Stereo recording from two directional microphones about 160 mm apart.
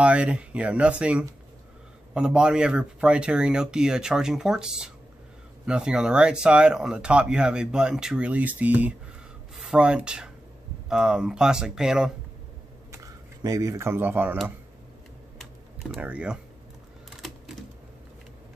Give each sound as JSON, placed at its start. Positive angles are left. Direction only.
{"t": 0.0, "sound": "speech", "side_deg": -5}
{"t": 12.9, "sound": "speech", "side_deg": -20}
{"t": 15.9, "sound": "speech", "side_deg": -10}